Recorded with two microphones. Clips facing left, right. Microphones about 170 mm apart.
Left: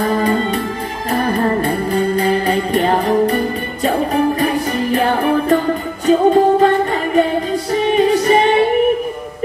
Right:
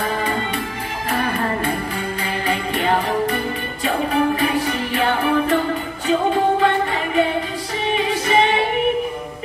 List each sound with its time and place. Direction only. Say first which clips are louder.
0.0 s music: left 7 dB; 40° left (ahead or behind)